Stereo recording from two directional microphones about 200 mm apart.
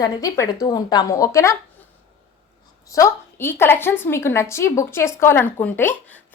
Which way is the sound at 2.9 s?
15° left (ahead or behind).